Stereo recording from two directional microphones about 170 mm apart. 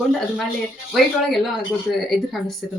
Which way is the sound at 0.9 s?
Centre (ahead or behind).